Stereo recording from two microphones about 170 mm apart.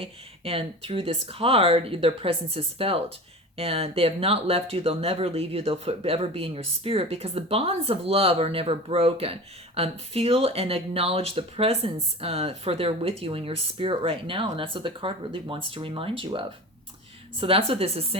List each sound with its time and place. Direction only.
0.0 s speech: 35° right (ahead or behind)